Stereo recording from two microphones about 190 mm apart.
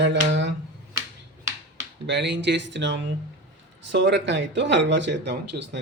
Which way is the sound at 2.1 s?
65° right (ahead or behind).